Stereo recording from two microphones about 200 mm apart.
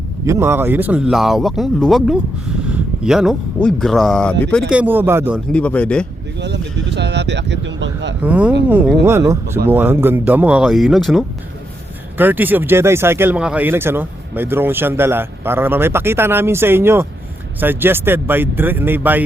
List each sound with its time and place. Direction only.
0.3 s speech: 15° right (ahead or behind); by 4.6 s 5° left (ahead or behind)
4.7 s speech: 10° right (ahead or behind)
5.5 s speech: 5° left (ahead or behind)
6.4 s speech: 60° right (ahead or behind)
8.2 s speech: 5° right (ahead or behind)